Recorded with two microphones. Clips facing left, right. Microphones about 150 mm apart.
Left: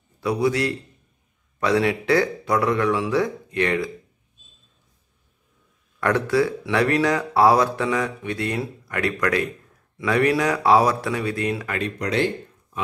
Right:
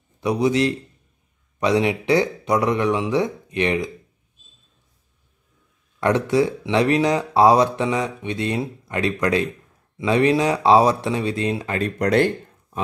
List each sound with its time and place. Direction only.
0.2 s speech: 20° right (ahead or behind)
5.9 s speech: 20° right (ahead or behind)
11.8 s speech: 55° right (ahead or behind)